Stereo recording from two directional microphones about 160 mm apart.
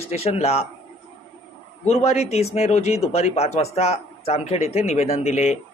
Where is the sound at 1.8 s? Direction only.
40° left (ahead or behind).